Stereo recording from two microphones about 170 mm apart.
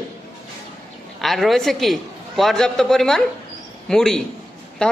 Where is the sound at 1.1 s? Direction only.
Centre (ahead or behind).